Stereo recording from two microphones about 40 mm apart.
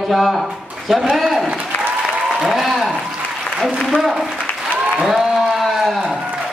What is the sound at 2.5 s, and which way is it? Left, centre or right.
Speech, centre.